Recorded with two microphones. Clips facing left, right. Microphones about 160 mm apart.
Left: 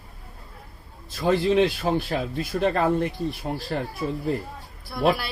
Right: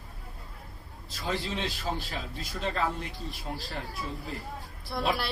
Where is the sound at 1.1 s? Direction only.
55° left (ahead or behind).